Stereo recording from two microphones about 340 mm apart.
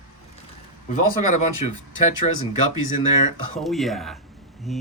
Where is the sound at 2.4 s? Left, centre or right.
Left.